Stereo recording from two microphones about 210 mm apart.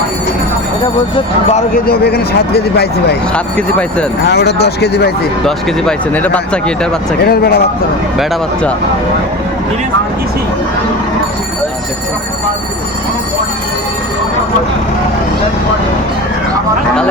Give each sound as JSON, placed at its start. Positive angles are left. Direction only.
{"t": 1.7, "sound": "speech", "side_deg": 50}
{"t": 3.3, "sound": "speech", "side_deg": 5}
{"t": 4.3, "sound": "speech", "side_deg": 50}
{"t": 5.5, "sound": "speech", "side_deg": 5}
{"t": 7.2, "sound": "speech", "side_deg": 50}